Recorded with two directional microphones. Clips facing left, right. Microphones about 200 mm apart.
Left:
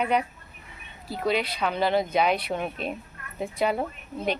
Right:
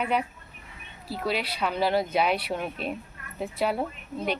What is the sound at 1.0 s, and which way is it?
Speech, 5° right (ahead or behind).